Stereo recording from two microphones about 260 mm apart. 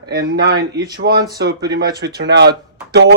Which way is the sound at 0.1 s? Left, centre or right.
Right.